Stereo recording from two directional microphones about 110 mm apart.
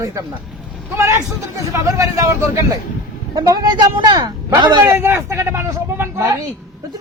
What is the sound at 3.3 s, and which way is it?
Speech, 35° right (ahead or behind).